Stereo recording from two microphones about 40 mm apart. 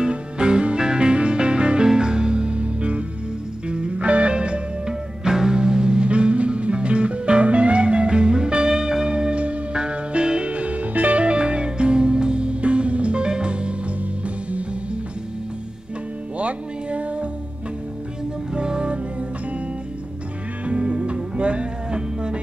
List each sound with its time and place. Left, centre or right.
0.0 s music: right
11.2 s music: right
16.3 s music: right
18.5 s music: right
20.6 s music: right